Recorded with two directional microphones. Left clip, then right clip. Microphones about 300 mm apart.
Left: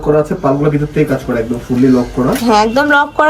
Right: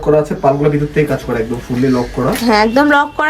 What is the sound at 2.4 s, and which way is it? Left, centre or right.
Speech, centre.